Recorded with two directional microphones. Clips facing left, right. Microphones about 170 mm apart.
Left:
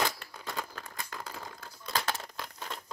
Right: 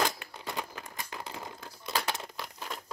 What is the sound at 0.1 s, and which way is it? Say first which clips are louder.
Crumpling: right 1 dB; 20° right (ahead or behind).